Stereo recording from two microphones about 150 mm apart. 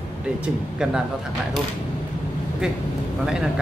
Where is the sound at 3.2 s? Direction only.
5° right (ahead or behind).